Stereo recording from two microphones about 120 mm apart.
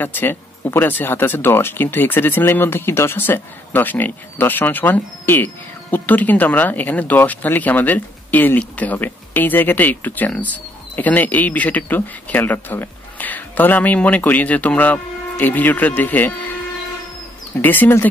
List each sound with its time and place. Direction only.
0.0 s speech: 15° left (ahead or behind)
17.6 s speech: 15° left (ahead or behind)